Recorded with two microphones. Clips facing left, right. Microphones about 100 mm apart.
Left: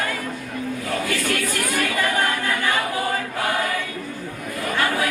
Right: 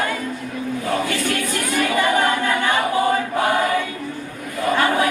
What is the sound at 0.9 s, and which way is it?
Choir, 25° right (ahead or behind).